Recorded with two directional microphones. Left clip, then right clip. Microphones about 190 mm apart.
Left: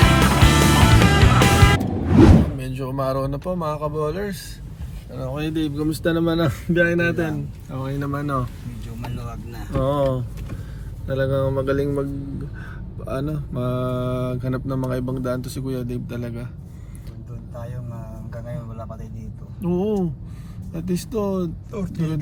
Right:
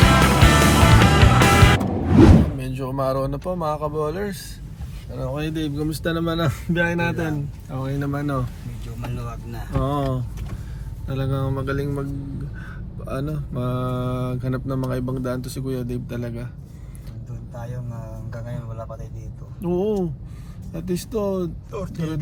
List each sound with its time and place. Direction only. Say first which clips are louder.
0.0 s music: right 1 dB; centre (ahead or behind)
5.1 s mantra: left 1 dB; 10° left (ahead or behind)
9.8 s mantra: left 5 dB; 15° left (ahead or behind)
13.1 s mantra: left 2 dB; 5° left (ahead or behind)
19.6 s mantra: right 1 dB; 10° left (ahead or behind)